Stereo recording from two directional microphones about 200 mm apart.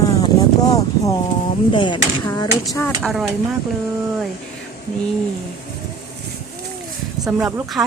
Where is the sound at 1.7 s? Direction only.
25° left (ahead or behind).